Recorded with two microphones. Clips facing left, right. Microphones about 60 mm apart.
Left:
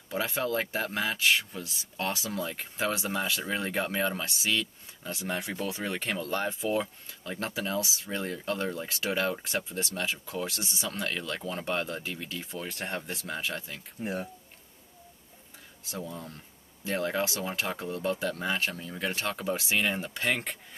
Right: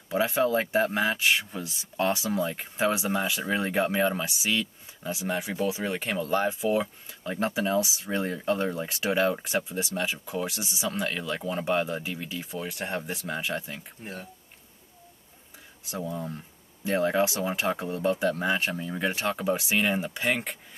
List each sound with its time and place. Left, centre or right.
0.1 s speech: right
15.9 s speech: centre